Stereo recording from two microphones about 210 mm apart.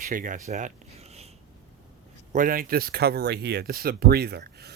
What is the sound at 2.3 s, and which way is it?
Speech, 40° right (ahead or behind).